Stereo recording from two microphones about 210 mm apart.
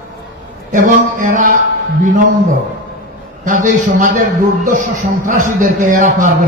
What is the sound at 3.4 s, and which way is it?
A man's voice, 40° right (ahead or behind).